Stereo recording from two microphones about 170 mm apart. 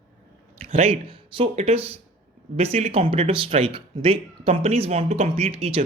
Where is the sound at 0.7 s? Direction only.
40° right (ahead or behind).